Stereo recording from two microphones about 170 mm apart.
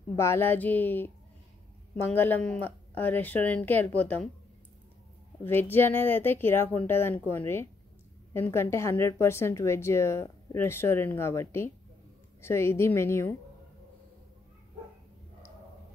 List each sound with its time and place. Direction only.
0.1 s a woman's voice: 15° left (ahead or behind)
5.4 s a woman's voice: 10° left (ahead or behind)